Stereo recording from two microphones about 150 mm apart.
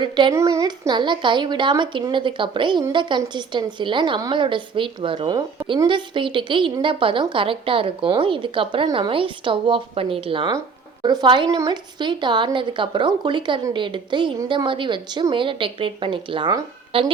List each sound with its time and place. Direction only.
0.0 s a woman's voice: 30° right (ahead or behind)
0.3 s a woman's voice: 20° right (ahead or behind); by 17.1 s 35° right (ahead or behind)